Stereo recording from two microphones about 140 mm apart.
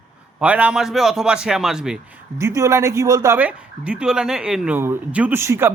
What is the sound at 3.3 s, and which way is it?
A man's voice, 10° right (ahead or behind).